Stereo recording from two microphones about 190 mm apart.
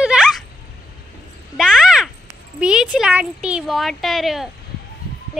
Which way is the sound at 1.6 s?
5° right (ahead or behind).